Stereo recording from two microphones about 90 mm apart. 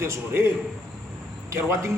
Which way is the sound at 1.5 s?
30° right (ahead or behind).